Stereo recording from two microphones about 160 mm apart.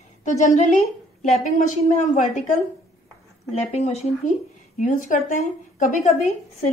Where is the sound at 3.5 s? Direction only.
45° left (ahead or behind).